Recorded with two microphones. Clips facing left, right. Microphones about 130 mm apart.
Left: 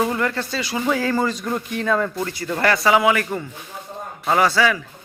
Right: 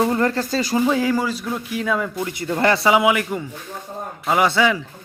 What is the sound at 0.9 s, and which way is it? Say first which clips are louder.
Speech: right 1 dB; 15° right (ahead or behind).